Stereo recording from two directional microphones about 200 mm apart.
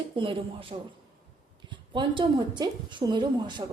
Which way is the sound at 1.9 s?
25° right (ahead or behind).